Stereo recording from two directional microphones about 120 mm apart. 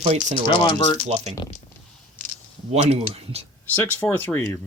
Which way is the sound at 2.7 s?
55° right (ahead or behind).